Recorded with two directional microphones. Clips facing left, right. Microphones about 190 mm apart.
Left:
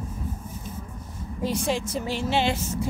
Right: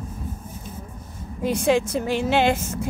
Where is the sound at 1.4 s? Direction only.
55° right (ahead or behind).